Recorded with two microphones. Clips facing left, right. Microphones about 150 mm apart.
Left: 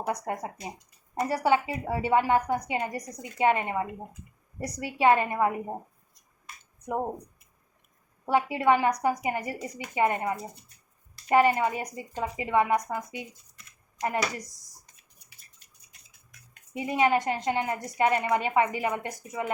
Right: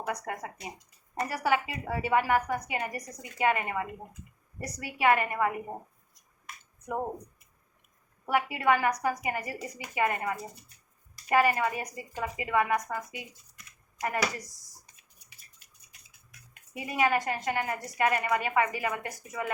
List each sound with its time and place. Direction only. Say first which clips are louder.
0.1 s a woman's voice: left 4 dB; 25° left (ahead or behind)
6.8 s speech: left 3 dB; 15° left (ahead or behind)
8.2 s a woman's voice: left 3 dB; 25° left (ahead or behind)
16.7 s a woman's voice: left 3 dB; 25° left (ahead or behind)